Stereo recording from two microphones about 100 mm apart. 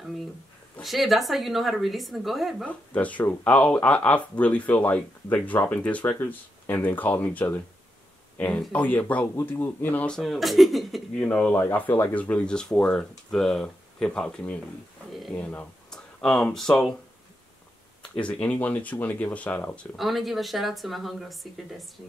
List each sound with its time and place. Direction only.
0.8 s speech: centre (ahead or behind)
2.6 s speech: 15° left (ahead or behind)
11.1 s speech: 15° left (ahead or behind)
15.9 s speech: 5° left (ahead or behind)
18.1 s speech: 10° left (ahead or behind)
20.0 s speech: centre (ahead or behind)